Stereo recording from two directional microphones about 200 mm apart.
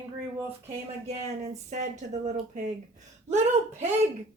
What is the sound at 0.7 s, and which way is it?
Speech, 30° right (ahead or behind).